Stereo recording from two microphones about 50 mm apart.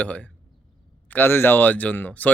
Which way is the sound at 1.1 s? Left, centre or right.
Left.